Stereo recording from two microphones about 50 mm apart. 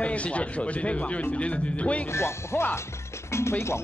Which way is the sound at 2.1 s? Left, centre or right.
Left.